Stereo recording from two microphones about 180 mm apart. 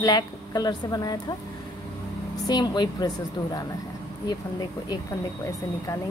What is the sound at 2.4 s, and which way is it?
Speech, 20° left (ahead or behind).